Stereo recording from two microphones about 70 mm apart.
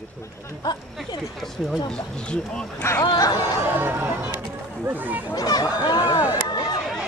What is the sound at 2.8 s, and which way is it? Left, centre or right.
Speech, left.